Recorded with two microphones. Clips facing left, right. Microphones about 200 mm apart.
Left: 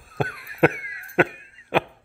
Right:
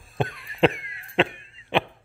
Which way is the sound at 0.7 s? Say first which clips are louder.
Left 1 dB; 60° left (ahead or behind).